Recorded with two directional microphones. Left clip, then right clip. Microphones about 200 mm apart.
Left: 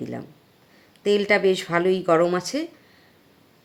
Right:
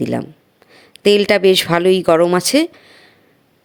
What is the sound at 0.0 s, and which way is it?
A woman's voice, 40° right (ahead or behind).